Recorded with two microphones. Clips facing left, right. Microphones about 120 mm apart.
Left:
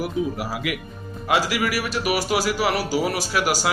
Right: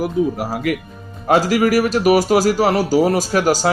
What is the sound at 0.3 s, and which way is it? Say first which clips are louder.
A man's voice: right 6 dB; 45° right (ahead or behind).